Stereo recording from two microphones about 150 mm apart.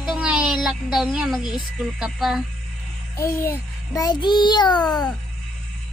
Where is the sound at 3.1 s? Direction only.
20° left (ahead or behind).